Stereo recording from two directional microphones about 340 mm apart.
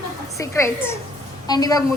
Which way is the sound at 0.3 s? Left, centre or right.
Centre.